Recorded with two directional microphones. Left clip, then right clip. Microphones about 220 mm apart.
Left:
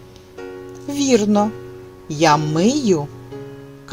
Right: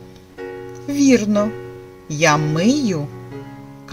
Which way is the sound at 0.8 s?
25° left (ahead or behind).